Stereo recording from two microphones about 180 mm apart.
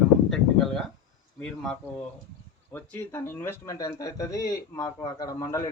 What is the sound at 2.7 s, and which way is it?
Speech, 10° left (ahead or behind).